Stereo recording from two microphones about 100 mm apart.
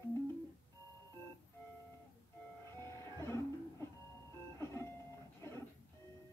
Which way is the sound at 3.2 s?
30° left (ahead or behind).